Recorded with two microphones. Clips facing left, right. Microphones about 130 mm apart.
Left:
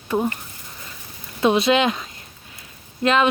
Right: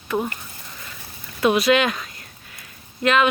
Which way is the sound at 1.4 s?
25° left (ahead or behind).